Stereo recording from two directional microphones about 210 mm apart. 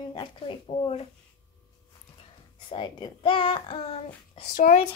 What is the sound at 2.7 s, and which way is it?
A child's voice, 25° left (ahead or behind).